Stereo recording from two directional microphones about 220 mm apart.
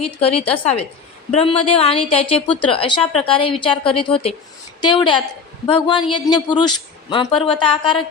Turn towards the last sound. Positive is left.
turn(degrees=20)  # may be behind; listen again after turning